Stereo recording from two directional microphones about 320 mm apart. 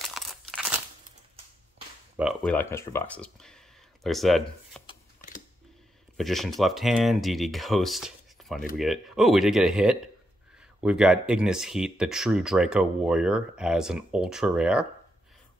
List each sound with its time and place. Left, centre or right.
0.0 s crumpling: centre
2.1 s speech: centre
4.8 s a sound: left
6.1 s speech: centre